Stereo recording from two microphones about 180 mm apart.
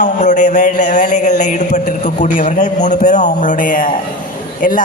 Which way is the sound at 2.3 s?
45° left (ahead or behind).